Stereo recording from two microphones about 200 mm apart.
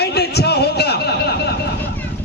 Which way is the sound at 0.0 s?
55° left (ahead or behind).